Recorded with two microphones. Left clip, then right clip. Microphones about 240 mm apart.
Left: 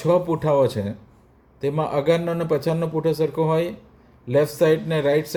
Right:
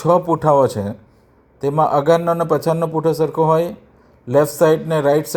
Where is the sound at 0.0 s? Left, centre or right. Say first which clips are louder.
Right 5 dB; centre.